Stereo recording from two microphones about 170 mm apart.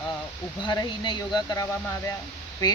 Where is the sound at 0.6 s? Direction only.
25° left (ahead or behind).